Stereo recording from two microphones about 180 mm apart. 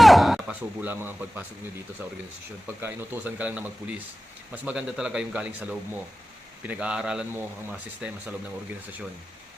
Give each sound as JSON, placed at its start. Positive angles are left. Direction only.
{"t": 0.0, "sound": "speech", "side_deg": 0}
{"t": 2.8, "sound": "speech", "side_deg": -10}